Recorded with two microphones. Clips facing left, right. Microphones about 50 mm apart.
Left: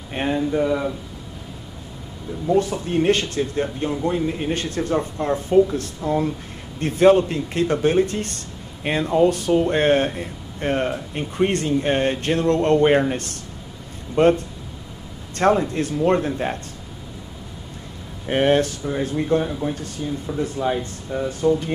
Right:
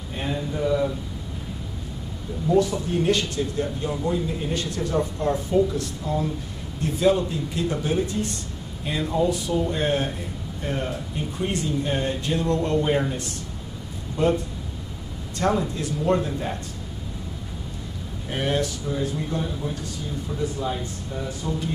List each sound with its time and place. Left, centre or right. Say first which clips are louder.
0.1 s a sound: left 6 dB; left
0.5 s speech: right 1 dB; left
2.5 s speech: left 1 dB; left
14.1 s a man's voice: left 6 dB; left
18.3 s speech: left 7 dB; left